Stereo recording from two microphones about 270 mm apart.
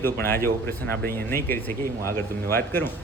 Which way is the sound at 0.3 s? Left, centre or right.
Centre.